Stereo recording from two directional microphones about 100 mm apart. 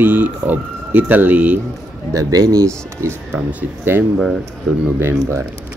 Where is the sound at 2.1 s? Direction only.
35° right (ahead or behind).